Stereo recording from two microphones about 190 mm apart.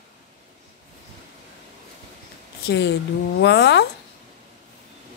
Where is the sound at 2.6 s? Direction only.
60° left (ahead or behind).